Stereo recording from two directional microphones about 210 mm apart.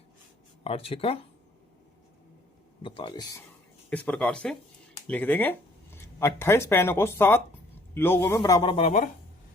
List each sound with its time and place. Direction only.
0.6 s speech: 25° left (ahead or behind)
2.8 s speech: 25° left (ahead or behind)
3.8 s a man's voice: 5° left (ahead or behind)
8.7 s speech: 35° left (ahead or behind)